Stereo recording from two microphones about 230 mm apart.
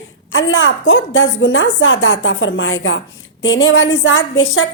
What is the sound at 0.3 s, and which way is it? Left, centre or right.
A woman's voice, left.